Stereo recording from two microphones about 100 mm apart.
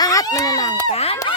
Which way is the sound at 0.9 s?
90° left.